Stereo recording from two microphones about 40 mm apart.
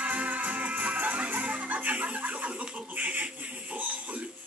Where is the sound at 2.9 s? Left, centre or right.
Right.